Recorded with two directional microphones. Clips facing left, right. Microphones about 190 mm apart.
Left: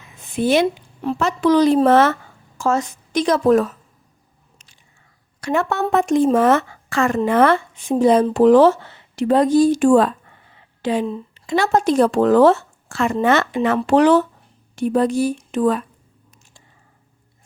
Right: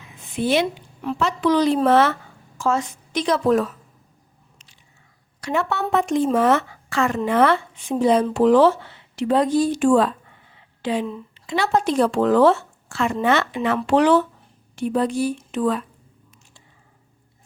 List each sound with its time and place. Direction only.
0.3 s speech: 45° left (ahead or behind)
5.4 s speech: 50° left (ahead or behind)